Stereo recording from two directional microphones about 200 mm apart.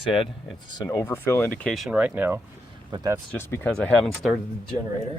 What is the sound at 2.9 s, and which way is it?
Speech, 20° right (ahead or behind).